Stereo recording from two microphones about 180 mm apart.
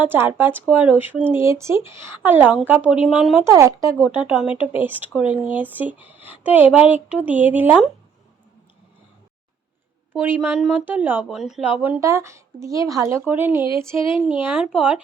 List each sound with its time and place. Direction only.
0.0 s speech: 10° right (ahead or behind)
10.1 s speech: 10° right (ahead or behind)
13.7 s a sound: 30° left (ahead or behind)
14.4 s speech: 5° right (ahead or behind)